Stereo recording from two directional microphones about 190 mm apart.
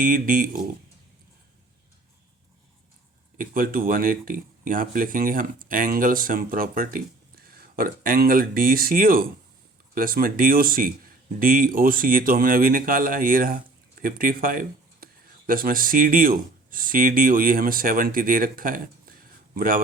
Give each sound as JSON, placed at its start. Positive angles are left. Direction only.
{"t": 0.0, "sound": "speech", "side_deg": -45}
{"t": 3.3, "sound": "speech", "side_deg": -50}